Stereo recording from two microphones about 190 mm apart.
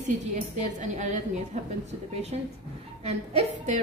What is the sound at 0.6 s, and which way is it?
A woman's voice, 40° right (ahead or behind).